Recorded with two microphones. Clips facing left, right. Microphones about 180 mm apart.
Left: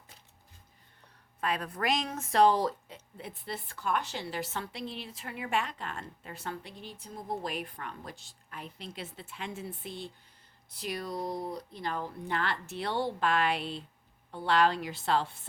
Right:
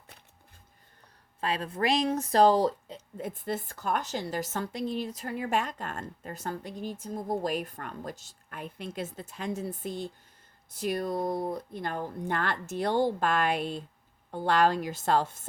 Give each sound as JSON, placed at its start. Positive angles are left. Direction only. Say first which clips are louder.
{"t": 1.4, "sound": "speech", "louder": "right 3 dB", "side_deg": -30}
{"t": 3.2, "sound": "speech", "louder": "right 7 dB", "side_deg": -45}